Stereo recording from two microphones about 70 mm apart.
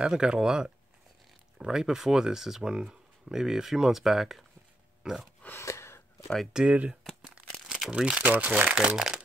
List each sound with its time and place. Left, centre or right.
0.0 s speech: centre
5.0 s grunt: centre
5.6 s gasp: left
6.2 s speech: centre
6.5 s speech: centre
7.6 s crumpling: centre
7.9 s speech: centre